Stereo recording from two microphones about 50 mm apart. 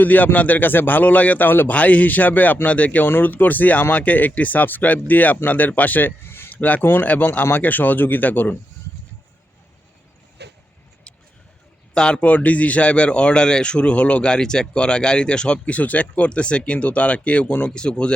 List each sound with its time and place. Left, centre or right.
0.0 s speech: left
1.7 s a man's voice: left
6.5 s speech: left
11.9 s a man's voice: centre
17.7 s a man's voice: centre